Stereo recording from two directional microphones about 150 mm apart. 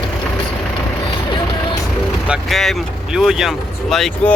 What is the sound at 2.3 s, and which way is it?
Speech, centre (ahead or behind).